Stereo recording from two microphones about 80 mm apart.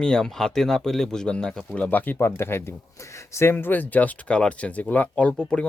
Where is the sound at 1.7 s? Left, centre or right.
Left.